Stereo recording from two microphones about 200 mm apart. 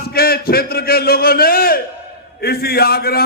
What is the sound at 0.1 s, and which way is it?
A man's voice, 50° left (ahead or behind).